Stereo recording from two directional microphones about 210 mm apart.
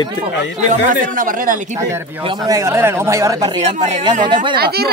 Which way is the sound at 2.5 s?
15° right (ahead or behind).